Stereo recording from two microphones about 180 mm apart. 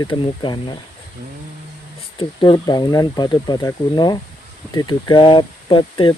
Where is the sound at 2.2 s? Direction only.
25° left (ahead or behind).